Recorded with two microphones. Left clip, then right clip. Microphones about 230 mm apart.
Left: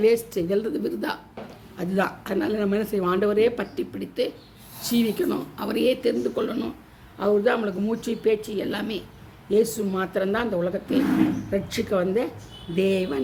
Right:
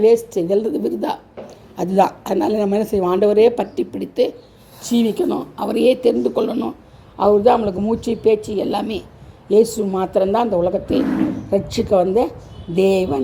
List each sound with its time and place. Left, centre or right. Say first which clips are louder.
0.3 s a woman's voice: right 7 dB; centre